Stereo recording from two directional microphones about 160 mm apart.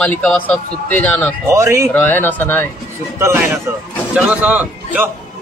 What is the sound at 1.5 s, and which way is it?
Speech, 20° right (ahead or behind).